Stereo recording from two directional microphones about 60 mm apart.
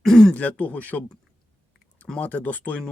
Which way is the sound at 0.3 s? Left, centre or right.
Left.